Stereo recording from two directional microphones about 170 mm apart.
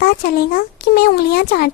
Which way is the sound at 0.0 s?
65° left (ahead or behind).